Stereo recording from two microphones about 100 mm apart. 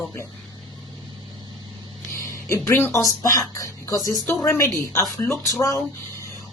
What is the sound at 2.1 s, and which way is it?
Speech, 30° left (ahead or behind).